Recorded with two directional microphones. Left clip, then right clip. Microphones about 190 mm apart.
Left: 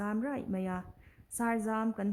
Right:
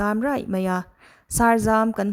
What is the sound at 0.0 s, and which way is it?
Speech, 30° right (ahead or behind).